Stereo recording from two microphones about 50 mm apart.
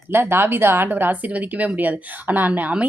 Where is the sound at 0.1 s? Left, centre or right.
Right.